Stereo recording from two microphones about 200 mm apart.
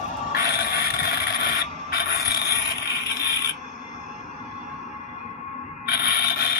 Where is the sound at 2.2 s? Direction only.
20° left (ahead or behind).